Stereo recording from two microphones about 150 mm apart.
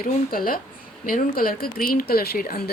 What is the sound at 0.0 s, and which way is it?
Speech, 75° left (ahead or behind).